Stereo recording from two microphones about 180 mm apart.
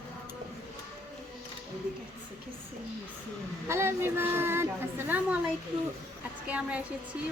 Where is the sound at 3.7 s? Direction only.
15° right (ahead or behind).